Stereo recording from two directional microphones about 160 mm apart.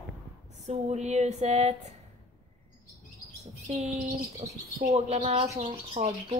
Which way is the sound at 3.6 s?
50° right (ahead or behind).